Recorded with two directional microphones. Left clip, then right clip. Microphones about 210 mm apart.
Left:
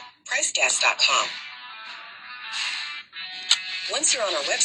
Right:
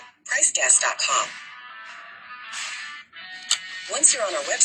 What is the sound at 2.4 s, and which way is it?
Music, centre (ahead or behind).